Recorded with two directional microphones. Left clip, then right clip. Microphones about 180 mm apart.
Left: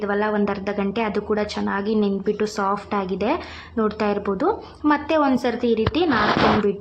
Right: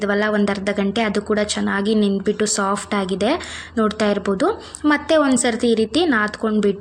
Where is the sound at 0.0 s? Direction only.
20° right (ahead or behind).